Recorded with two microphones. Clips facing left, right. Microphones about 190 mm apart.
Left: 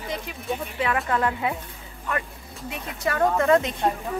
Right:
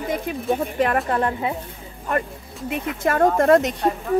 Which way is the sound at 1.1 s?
30° right (ahead or behind).